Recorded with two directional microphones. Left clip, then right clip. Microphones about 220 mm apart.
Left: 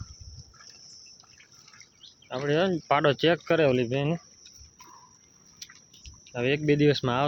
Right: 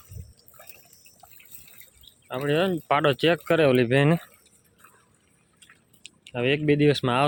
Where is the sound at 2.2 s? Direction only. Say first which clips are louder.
Right 1 dB; 5° right (ahead or behind).